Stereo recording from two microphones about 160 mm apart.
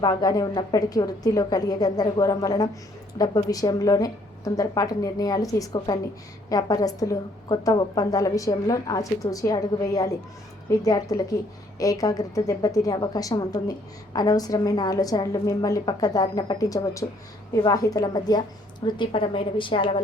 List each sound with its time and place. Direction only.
0.0 s a woman's voice: 25° left (ahead or behind)